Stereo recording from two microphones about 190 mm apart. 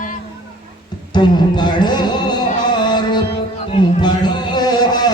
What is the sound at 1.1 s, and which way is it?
Speech, 25° left (ahead or behind).